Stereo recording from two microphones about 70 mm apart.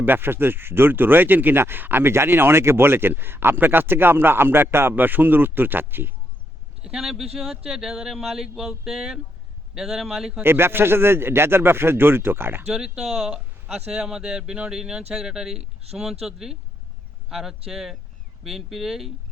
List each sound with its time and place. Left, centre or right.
0.0 s speech: right
6.8 s speech: centre
10.4 s speech: right
12.6 s speech: centre